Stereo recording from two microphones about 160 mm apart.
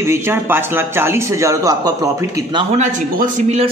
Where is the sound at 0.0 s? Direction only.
15° right (ahead or behind).